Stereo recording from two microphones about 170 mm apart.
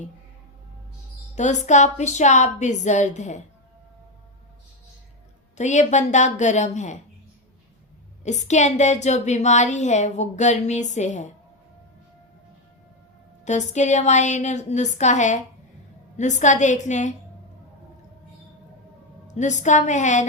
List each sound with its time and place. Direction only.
1.4 s a woman's voice: 45° left (ahead or behind)
5.5 s a woman's voice: 45° left (ahead or behind)
8.2 s a woman's voice: 45° left (ahead or behind)
13.4 s a woman's voice: 45° left (ahead or behind)
19.3 s a woman's voice: 45° left (ahead or behind)